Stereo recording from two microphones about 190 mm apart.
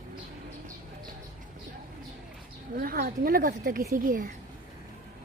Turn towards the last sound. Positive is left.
turn(degrees=-45)  # may be behind; listen again after turning